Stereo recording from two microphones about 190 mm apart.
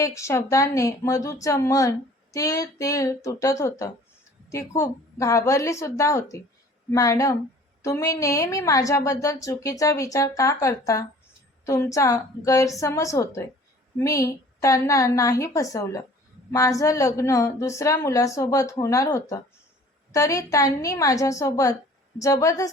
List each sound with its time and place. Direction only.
0.0 s a woman's voice: 15° left (ahead or behind)